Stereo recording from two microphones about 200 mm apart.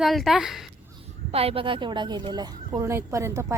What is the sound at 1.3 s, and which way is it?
A woman's voice, 30° right (ahead or behind).